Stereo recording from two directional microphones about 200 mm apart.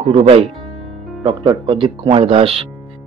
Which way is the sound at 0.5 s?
Centre (ahead or behind).